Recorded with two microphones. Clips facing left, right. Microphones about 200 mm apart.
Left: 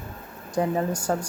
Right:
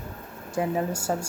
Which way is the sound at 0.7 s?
10° right (ahead or behind).